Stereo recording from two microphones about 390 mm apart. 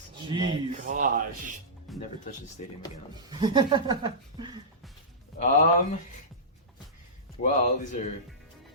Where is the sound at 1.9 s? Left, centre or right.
Centre.